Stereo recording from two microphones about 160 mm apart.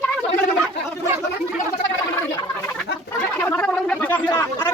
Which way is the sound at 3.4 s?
10° left (ahead or behind).